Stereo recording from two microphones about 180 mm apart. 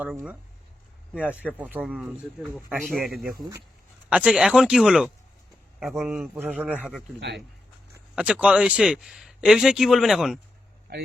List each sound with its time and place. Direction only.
0.0 s a man's voice: 10° right (ahead or behind)
7.9 s speech: 5° right (ahead or behind)
10.9 s speech: 60° right (ahead or behind)